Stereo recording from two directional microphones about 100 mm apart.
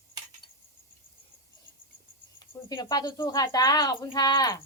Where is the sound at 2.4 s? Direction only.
45° left (ahead or behind).